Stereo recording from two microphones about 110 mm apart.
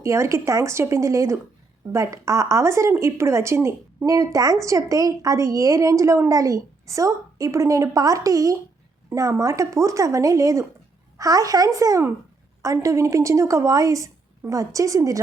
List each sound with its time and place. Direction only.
0.0 s a woman's voice: 25° right (ahead or behind)